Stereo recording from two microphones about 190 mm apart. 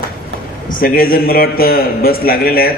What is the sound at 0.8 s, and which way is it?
A man's voice, 50° left (ahead or behind).